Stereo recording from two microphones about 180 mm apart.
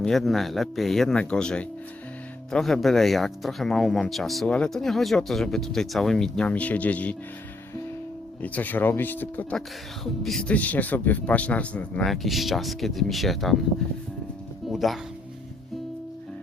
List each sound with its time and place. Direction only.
0.0 s speech: centre (ahead or behind)
8.4 s speech: 10° left (ahead or behind)
14.7 s speech: centre (ahead or behind)